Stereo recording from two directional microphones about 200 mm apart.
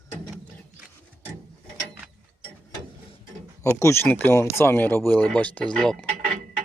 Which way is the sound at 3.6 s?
15° left (ahead or behind).